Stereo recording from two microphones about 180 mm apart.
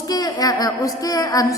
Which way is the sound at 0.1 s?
20° left (ahead or behind).